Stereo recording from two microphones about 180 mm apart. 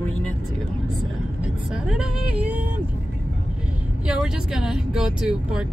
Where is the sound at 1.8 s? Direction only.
5° right (ahead or behind).